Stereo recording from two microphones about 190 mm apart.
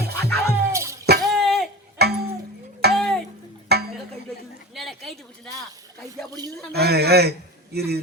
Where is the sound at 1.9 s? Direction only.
55° right (ahead or behind).